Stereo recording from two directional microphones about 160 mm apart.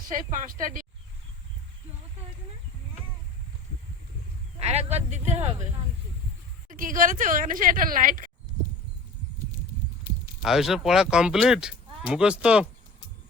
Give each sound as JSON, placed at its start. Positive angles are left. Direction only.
{"t": 0.1, "sound": "speech", "side_deg": -55}
{"t": 4.6, "sound": "speech", "side_deg": -40}
{"t": 6.7, "sound": "speech", "side_deg": -55}
{"t": 10.4, "sound": "speech", "side_deg": 0}